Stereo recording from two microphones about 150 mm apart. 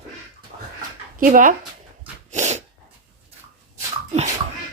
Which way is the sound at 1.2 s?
60° right (ahead or behind).